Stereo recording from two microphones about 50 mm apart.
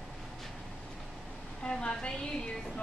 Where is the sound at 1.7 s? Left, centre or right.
Centre.